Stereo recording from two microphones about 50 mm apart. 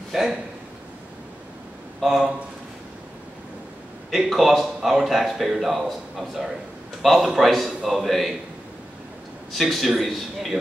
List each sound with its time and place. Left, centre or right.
0.1 s a man's voice: centre
2.0 s speech: centre
4.3 s a man's voice: centre
9.5 s speech: centre